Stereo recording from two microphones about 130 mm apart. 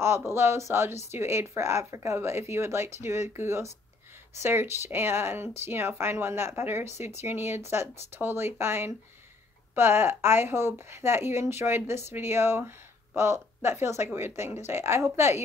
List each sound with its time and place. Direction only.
0.3 s speech: 20° right (ahead or behind)